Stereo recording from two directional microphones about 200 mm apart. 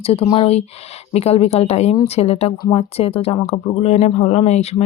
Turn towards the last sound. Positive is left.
turn(degrees=35)  # may be behind; listen again after turning